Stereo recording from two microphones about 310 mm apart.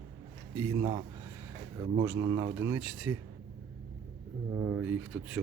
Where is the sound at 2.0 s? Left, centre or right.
Centre.